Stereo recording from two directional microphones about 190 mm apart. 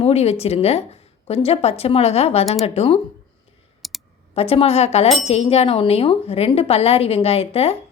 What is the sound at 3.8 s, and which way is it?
Computer keyboard, centre (ahead or behind).